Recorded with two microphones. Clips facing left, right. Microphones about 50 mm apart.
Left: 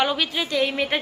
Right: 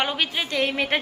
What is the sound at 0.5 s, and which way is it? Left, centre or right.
Speech, right.